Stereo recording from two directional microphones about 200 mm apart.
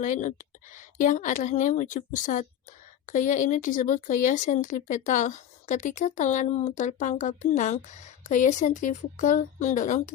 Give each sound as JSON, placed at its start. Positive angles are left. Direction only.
{"t": 0.0, "sound": "speech", "side_deg": 40}